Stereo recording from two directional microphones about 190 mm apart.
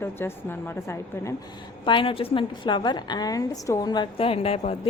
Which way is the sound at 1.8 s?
25° left (ahead or behind).